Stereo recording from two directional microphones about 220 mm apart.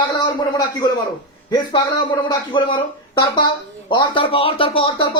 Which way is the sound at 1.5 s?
20° left (ahead or behind).